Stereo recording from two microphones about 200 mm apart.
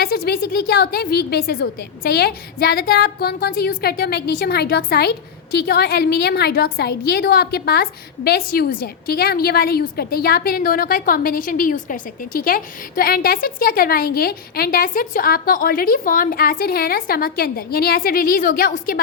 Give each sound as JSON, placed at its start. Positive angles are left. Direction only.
{"t": 0.0, "sound": "a woman's voice", "side_deg": 50}